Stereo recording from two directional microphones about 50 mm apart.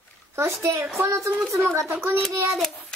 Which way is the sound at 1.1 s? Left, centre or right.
Right.